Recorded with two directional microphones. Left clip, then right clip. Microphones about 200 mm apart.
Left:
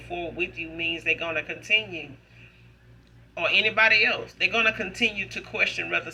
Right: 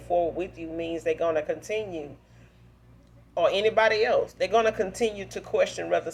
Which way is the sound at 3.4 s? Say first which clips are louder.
Left 1 dB; 35° right (ahead or behind).